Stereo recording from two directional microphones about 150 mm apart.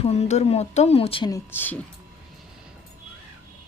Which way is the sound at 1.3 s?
15° left (ahead or behind).